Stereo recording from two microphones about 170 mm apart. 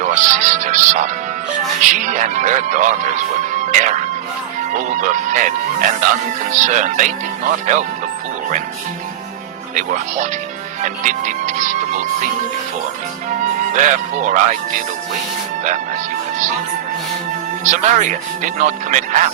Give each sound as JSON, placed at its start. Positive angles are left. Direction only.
{"t": 0.0, "sound": "music", "side_deg": -45}
{"t": 3.5, "sound": "speech", "side_deg": -45}
{"t": 9.7, "sound": "speech", "side_deg": -45}
{"t": 13.7, "sound": "speech", "side_deg": -45}
{"t": 17.6, "sound": "speech", "side_deg": -45}